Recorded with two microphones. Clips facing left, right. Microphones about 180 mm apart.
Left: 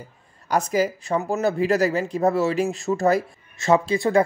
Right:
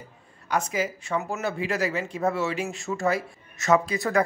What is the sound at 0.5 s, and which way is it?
Speech, 40° left (ahead or behind).